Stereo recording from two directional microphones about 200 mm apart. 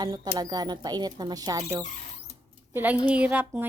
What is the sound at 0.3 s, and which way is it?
Speech, 20° right (ahead or behind).